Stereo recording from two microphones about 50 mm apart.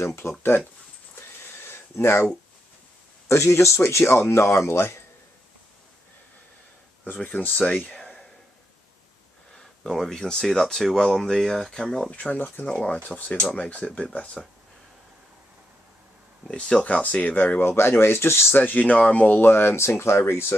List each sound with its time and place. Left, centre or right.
0.0 s speech: left
1.6 s a sound: left
3.3 s speech: left
7.2 s speech: left
9.6 s speech: centre
12.1 s speech: left
12.4 s speech: left
12.6 s speech: left
16.4 s speech: centre
17.6 s speech: left
18.6 s speech: left
19.4 s speech: left